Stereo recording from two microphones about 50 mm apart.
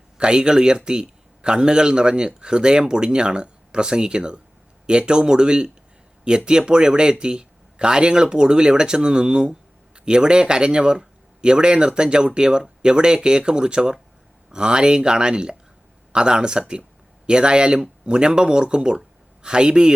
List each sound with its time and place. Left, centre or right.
0.2 s speech: centre